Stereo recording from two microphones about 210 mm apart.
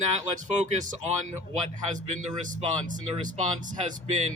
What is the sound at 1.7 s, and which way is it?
Speech, 35° right (ahead or behind).